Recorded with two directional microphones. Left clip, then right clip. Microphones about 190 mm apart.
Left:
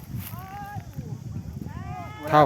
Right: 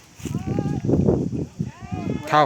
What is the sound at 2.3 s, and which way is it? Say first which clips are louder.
Speech: right 1 dB; 5° left (ahead or behind).